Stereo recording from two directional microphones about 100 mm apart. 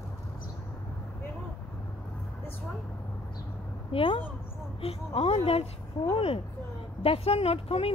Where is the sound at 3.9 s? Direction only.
60° left (ahead or behind).